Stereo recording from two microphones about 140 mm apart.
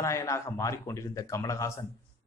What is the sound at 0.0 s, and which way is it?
Speech, 20° left (ahead or behind).